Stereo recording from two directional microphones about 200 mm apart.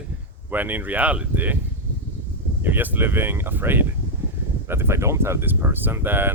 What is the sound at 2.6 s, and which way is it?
Speech, 10° right (ahead or behind).